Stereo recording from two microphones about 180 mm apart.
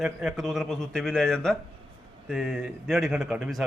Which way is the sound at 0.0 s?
Centre (ahead or behind).